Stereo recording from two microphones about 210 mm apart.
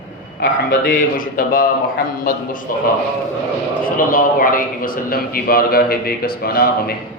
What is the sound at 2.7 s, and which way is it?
A man's voice, 40° left (ahead or behind).